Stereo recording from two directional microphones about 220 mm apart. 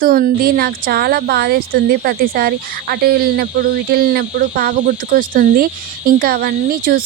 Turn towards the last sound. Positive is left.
turn(degrees=-40)  # may be behind; listen again after turning